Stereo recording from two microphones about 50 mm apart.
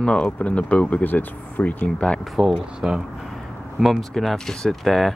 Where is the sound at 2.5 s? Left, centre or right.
Centre.